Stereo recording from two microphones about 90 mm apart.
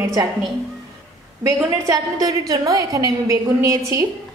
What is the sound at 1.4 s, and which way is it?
A woman's voice, 40° right (ahead or behind).